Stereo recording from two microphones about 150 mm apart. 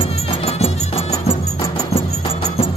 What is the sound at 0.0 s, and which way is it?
Music, 40° left (ahead or behind).